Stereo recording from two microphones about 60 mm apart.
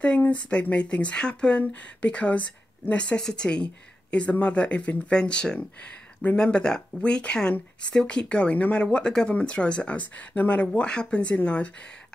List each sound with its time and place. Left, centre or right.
0.2 s speech: left
8.8 s speech: centre